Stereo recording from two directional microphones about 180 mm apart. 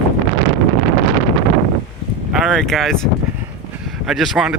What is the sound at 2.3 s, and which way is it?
Speech, centre (ahead or behind).